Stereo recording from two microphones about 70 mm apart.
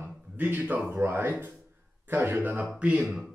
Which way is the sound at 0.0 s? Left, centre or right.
Right.